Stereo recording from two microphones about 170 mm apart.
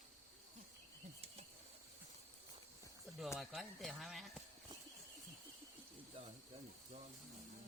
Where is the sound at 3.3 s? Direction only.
Centre (ahead or behind).